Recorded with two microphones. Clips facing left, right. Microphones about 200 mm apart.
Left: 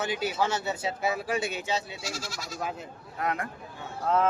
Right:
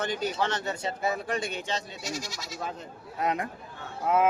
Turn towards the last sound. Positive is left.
turn(degrees=-10)  # may be behind; listen again after turning